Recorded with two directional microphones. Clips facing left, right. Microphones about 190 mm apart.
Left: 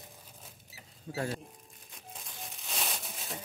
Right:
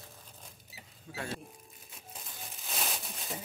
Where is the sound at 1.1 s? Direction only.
35° left (ahead or behind).